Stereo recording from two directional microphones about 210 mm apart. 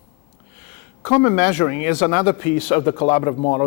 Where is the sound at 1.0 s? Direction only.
20° left (ahead or behind).